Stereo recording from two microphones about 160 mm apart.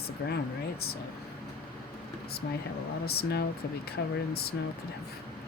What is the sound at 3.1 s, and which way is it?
Speech, 80° left.